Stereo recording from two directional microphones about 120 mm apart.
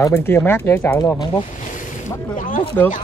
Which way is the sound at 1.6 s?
90° left.